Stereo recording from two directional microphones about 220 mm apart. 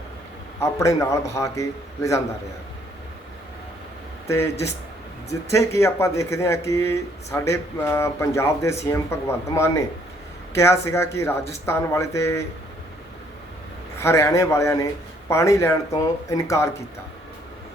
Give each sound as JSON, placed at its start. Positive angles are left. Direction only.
{"t": 0.6, "sound": "speech", "side_deg": 15}
{"t": 5.3, "sound": "speech", "side_deg": 15}
{"t": 14.0, "sound": "speech", "side_deg": 15}